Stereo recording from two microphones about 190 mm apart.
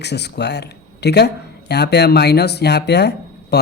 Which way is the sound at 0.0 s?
60° left (ahead or behind).